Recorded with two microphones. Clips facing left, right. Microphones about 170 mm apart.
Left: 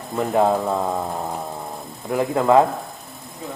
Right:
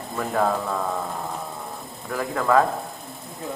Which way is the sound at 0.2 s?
25° left (ahead or behind).